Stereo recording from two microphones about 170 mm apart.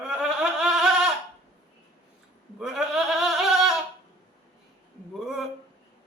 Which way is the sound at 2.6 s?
Centre (ahead or behind).